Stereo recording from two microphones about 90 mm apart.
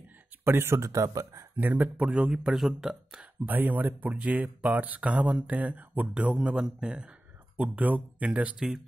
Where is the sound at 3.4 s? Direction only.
20° right (ahead or behind).